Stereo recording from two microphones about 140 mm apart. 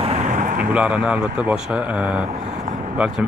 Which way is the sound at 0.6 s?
10° right (ahead or behind).